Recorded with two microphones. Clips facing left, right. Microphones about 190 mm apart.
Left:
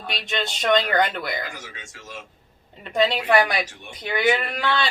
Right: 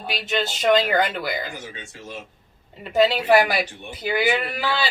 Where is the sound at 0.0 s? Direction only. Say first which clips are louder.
Right 3 dB; 5° right (ahead or behind).